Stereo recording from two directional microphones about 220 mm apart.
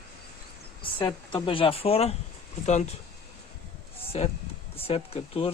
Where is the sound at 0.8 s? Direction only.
20° left (ahead or behind).